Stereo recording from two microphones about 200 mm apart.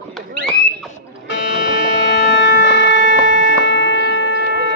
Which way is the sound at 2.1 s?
60° left (ahead or behind).